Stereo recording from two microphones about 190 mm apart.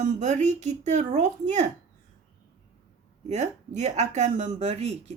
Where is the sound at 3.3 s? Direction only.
40° right (ahead or behind).